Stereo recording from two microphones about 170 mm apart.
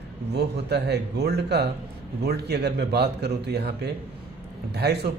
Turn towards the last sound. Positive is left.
turn(degrees=-75)  # may be behind; listen again after turning